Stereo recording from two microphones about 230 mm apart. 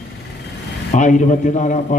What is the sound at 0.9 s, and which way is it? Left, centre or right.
A man's voice, left.